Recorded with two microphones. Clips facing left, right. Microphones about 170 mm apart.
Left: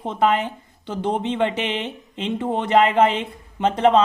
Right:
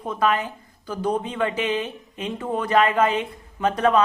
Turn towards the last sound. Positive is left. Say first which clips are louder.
# left 3 dB
turn(degrees=25)  # may be behind; listen again after turning